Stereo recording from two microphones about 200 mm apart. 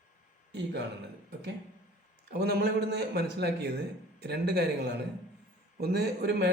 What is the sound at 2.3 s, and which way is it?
A man's voice, 55° right (ahead or behind).